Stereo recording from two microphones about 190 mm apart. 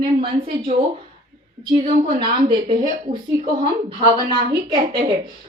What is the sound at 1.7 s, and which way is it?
A woman's voice, 30° right (ahead or behind).